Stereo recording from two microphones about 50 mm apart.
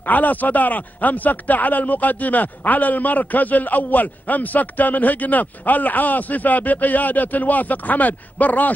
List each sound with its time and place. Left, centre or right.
0.0 s speech: left